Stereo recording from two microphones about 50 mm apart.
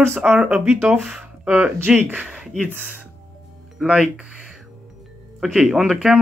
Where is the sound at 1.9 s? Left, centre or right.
Right.